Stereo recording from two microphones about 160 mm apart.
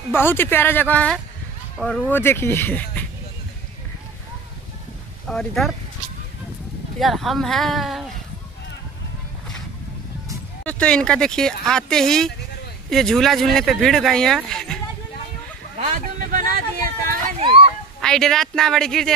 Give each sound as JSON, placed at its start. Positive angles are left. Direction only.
{"t": 0.1, "sound": "speech", "side_deg": 15}
{"t": 5.3, "sound": "speech", "side_deg": 5}
{"t": 7.0, "sound": "speech", "side_deg": 0}
{"t": 10.6, "sound": "speech", "side_deg": 5}
{"t": 15.8, "sound": "vehicle", "side_deg": -55}
{"t": 17.4, "sound": "a sound", "side_deg": -35}
{"t": 18.0, "sound": "speech", "side_deg": 5}